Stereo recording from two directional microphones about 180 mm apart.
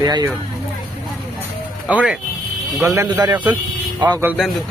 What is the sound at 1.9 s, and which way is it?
Speech, 5° right (ahead or behind).